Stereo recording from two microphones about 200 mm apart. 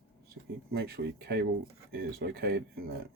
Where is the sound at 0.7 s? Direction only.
50° right (ahead or behind).